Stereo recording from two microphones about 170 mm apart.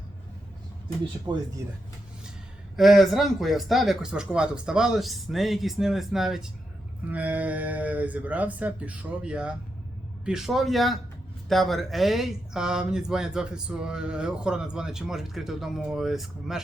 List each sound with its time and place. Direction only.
1.3 s speech: 20° right (ahead or behind)
2.7 s speech: centre (ahead or behind)